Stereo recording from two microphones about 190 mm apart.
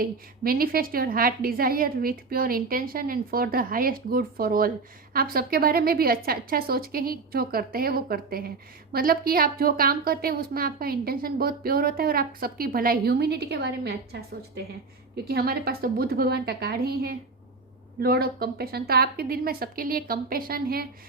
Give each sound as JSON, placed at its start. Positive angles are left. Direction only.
{"t": 0.0, "sound": "a woman's voice", "side_deg": -50}